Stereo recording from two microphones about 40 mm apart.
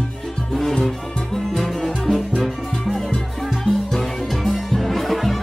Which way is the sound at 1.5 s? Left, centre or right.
Centre.